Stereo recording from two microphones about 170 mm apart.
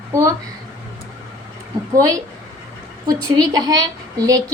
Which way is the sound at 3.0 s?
25° right (ahead or behind).